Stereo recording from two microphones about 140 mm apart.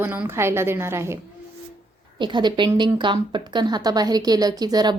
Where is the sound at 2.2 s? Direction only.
35° right (ahead or behind).